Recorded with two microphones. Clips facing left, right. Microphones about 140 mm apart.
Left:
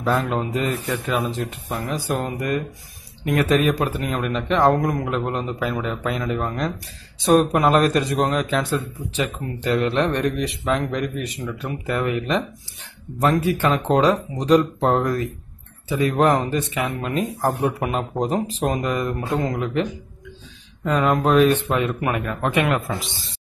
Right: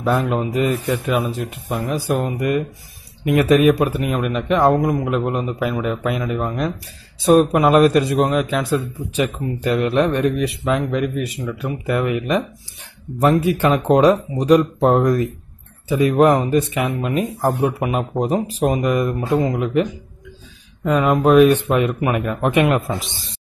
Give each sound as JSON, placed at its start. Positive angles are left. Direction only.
{"t": 0.2, "sound": "a man's voice", "side_deg": -5}
{"t": 3.3, "sound": "a man's voice", "side_deg": -15}
{"t": 17.6, "sound": "a man's voice", "side_deg": -5}